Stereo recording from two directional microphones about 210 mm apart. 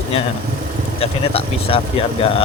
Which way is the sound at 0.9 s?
25° left (ahead or behind).